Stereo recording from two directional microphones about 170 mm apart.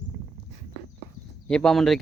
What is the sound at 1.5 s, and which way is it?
Speech, 5° left (ahead or behind).